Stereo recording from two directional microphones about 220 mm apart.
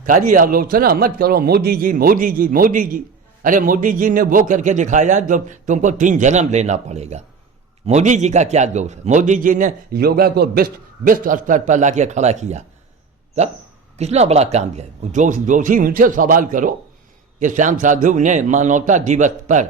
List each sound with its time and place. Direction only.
0.0 s a man's voice: 35° right (ahead or behind)
14.0 s a man's voice: 30° right (ahead or behind)